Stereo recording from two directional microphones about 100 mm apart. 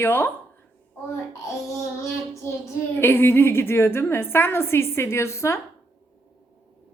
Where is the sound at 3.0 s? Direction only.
25° left (ahead or behind).